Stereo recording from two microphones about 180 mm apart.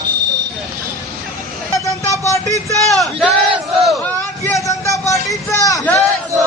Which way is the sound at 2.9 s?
Centre (ahead or behind).